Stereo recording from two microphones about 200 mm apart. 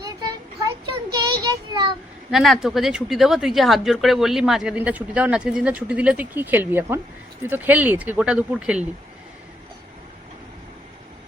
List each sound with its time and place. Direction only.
0.0 s a sound: 20° right (ahead or behind)
1.1 s child singing: 20° right (ahead or behind)
2.3 s speech: centre (ahead or behind)